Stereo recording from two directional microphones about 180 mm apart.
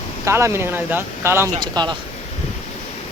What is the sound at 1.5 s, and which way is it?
Speech, 25° right (ahead or behind).